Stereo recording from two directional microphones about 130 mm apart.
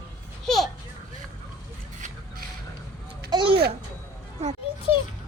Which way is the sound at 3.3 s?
40° right (ahead or behind).